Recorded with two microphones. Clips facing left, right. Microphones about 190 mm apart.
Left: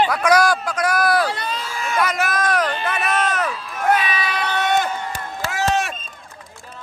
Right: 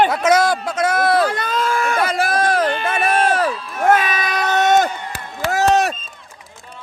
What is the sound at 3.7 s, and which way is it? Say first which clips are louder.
Crowd: right 3 dB; 50° right (ahead or behind).